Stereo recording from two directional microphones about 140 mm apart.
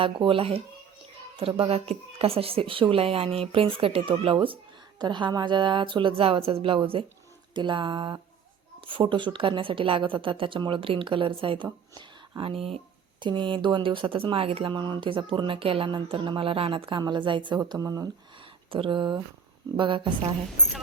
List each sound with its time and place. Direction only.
0.0 s speech: 40° right (ahead or behind)
18.7 s speech: 35° right (ahead or behind)